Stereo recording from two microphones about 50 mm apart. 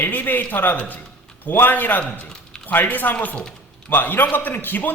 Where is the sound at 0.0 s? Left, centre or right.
Left.